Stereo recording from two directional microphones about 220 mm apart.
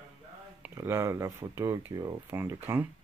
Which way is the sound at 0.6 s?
10° right (ahead or behind).